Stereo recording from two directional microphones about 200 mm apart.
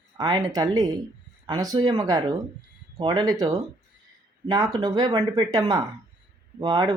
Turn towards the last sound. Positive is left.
turn(degrees=-20)  # may be behind; listen again after turning